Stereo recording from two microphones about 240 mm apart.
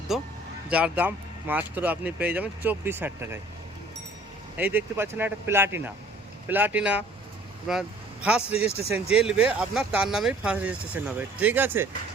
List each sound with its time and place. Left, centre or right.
0.1 s speech: centre
4.5 s speech: centre
8.5 s speech: left
8.9 s speech: centre